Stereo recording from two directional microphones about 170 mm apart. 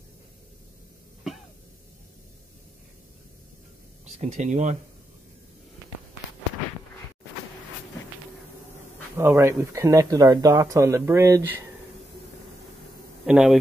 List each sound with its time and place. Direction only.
4.0 s speech: 45° right (ahead or behind)
9.1 s speech: 15° right (ahead or behind)
13.2 s a man's voice: 5° right (ahead or behind)